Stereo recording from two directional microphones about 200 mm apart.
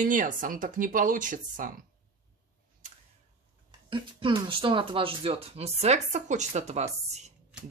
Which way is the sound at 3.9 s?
25° right (ahead or behind).